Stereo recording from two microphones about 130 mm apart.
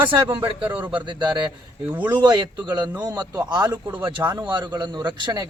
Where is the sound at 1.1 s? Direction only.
35° right (ahead or behind).